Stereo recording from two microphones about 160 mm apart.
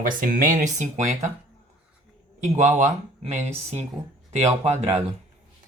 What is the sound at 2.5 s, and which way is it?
Speech, 50° right (ahead or behind).